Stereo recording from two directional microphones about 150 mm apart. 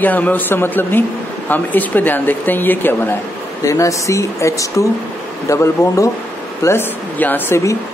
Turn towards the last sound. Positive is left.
turn(degrees=15)  # may be behind; listen again after turning